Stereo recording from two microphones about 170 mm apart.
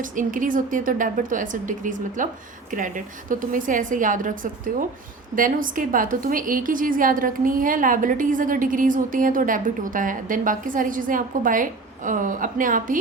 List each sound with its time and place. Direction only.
0.0 s a woman's voice: 50° right (ahead or behind)